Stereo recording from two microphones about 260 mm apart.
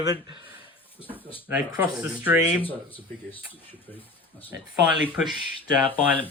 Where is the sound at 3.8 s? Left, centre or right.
Centre.